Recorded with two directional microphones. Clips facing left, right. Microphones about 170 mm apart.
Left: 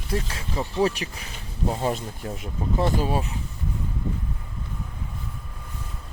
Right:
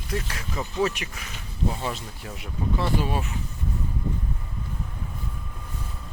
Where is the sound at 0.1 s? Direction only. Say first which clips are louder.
Left 2 dB; 30° left (ahead or behind).